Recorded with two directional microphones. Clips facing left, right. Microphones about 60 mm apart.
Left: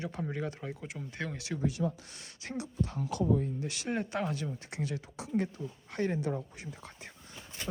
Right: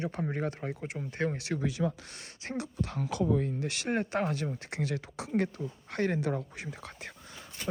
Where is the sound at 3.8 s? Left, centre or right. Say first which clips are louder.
Right 3 dB; right.